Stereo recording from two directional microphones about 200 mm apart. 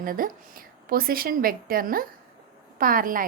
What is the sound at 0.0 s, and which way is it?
A woman's voice, 45° right (ahead or behind).